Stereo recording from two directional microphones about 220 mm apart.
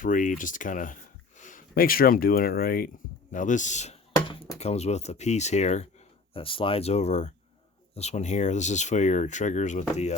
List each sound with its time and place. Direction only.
0.0 s speech: 35° left (ahead or behind)
3.3 s a sound: 35° left (ahead or behind)
4.6 s speech: 30° left (ahead or behind)